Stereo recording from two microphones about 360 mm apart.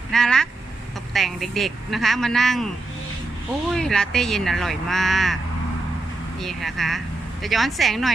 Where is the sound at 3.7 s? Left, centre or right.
Centre.